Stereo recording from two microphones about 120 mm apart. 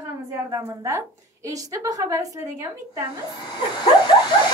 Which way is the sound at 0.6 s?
25° right (ahead or behind).